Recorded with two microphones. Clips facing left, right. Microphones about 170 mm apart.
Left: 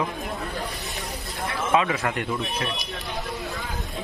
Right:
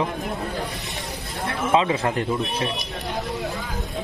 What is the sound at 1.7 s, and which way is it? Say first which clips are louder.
Speech: right 3 dB; 25° right (ahead or behind).